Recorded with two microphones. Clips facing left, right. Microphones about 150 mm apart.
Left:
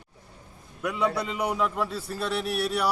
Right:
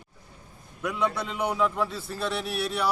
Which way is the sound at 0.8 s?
5° left (ahead or behind).